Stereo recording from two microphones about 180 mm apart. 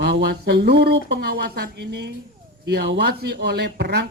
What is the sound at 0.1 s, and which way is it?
Speech, 65° right (ahead or behind).